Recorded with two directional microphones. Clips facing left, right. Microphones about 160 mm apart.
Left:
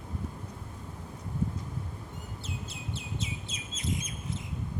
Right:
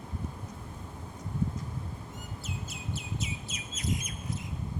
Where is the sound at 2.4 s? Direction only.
30° left (ahead or behind).